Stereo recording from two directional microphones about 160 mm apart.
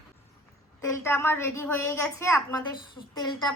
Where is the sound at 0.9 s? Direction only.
15° left (ahead or behind).